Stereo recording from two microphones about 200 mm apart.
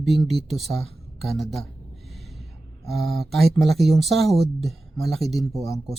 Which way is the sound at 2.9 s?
Centre (ahead or behind).